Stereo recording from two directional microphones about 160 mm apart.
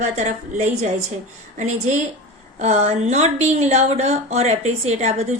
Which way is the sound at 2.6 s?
45° right (ahead or behind).